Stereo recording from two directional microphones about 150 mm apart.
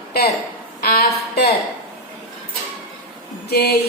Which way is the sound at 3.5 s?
90° left.